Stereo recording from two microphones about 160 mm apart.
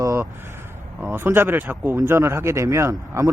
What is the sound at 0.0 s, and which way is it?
Vehicle, 20° right (ahead or behind).